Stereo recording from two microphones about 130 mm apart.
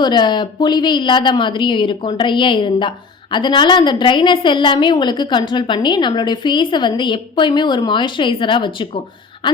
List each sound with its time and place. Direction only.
0.0 s a woman's voice: 35° left (ahead or behind)